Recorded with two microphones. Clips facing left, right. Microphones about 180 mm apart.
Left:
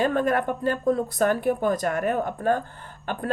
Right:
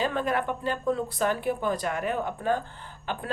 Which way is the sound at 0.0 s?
50° left (ahead or behind).